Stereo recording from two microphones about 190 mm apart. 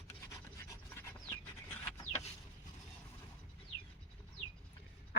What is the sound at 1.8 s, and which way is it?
Chicken, 10° left (ahead or behind).